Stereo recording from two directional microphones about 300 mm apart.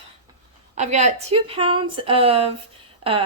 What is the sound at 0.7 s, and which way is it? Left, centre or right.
Speech, right.